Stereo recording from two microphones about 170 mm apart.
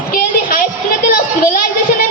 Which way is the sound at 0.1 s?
55° left (ahead or behind).